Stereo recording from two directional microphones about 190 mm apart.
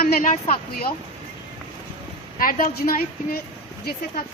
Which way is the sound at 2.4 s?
45° left (ahead or behind).